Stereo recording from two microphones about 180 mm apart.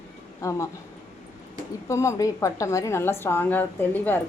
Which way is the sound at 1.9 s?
15° left (ahead or behind).